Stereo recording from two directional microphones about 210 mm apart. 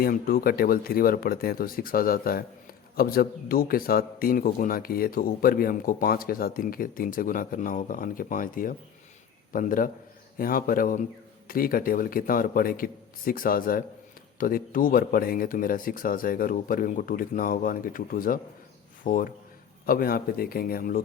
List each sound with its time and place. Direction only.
0.0 s a man's voice: 45° left (ahead or behind)